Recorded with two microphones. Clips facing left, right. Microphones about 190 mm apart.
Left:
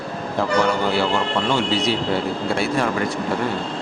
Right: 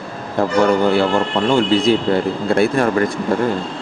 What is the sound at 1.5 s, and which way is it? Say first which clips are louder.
Speech: right 9 dB; 50° right (ahead or behind).